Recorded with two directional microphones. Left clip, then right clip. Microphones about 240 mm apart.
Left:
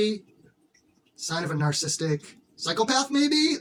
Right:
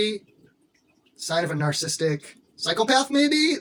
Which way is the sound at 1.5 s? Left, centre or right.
Centre.